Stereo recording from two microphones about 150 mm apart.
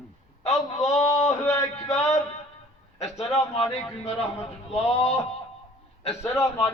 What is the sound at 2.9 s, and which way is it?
A man's voice, 45° left (ahead or behind).